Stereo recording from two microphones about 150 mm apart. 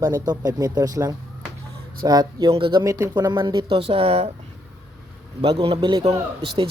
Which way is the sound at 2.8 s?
20° right (ahead or behind).